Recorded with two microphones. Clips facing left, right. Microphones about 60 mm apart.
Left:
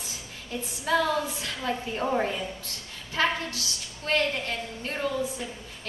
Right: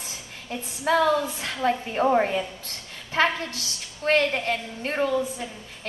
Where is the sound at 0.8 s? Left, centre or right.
Right.